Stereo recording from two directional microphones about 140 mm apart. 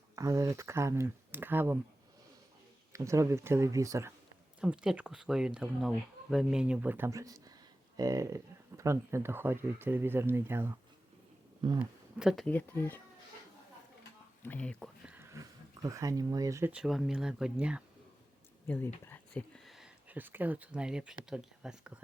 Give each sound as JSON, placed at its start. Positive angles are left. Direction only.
{"t": 0.2, "sound": "speech", "side_deg": -20}
{"t": 2.9, "sound": "speech", "side_deg": -20}
{"t": 4.6, "sound": "speech", "side_deg": -5}
{"t": 11.8, "sound": "speech", "side_deg": -5}
{"t": 12.5, "sound": "speech", "side_deg": 15}
{"t": 14.4, "sound": "speech", "side_deg": 10}
{"t": 15.0, "sound": "a sound", "side_deg": -10}
{"t": 15.3, "sound": "speech", "side_deg": -25}
{"t": 16.7, "sound": "speech", "side_deg": -5}
{"t": 18.6, "sound": "speech", "side_deg": 15}
{"t": 19.0, "sound": "a sound", "side_deg": 15}
{"t": 19.6, "sound": "speech", "side_deg": -5}